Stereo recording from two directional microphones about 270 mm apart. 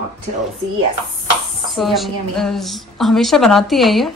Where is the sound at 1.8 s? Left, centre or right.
Centre.